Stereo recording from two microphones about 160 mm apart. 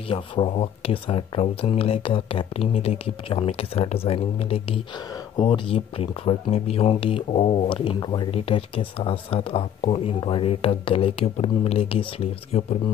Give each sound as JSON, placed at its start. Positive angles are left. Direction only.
{"t": 0.1, "sound": "speech", "side_deg": 35}